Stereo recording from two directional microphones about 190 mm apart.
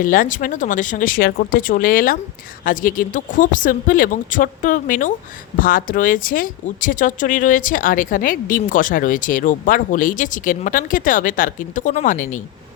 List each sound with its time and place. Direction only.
0.0 s a woman's voice: 45° left (ahead or behind)